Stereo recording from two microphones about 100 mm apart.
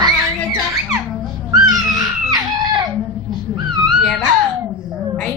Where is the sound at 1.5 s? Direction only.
35° right (ahead or behind).